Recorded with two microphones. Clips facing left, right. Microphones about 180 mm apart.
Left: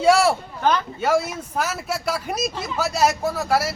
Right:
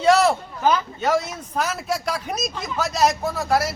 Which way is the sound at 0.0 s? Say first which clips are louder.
Even; 5° left (ahead or behind).